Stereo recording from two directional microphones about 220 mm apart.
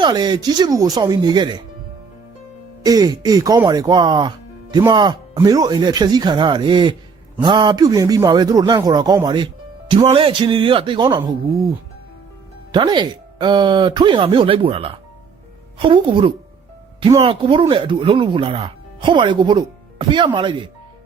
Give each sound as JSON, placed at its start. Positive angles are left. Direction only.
{"t": 0.0, "sound": "speech", "side_deg": -20}
{"t": 2.8, "sound": "speech", "side_deg": -15}
{"t": 12.7, "sound": "speech", "side_deg": -20}